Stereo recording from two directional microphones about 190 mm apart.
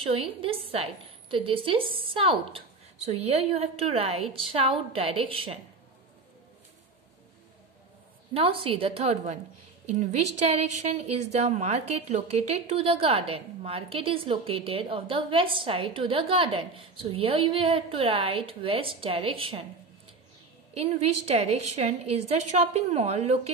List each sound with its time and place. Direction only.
0.0 s a woman's voice: 30° right (ahead or behind)
8.3 s a woman's voice: 30° right (ahead or behind)
20.7 s speech: 35° right (ahead or behind)